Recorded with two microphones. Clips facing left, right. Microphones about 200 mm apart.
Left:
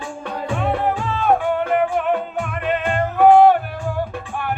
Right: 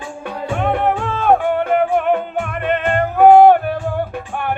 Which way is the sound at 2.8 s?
55° right (ahead or behind).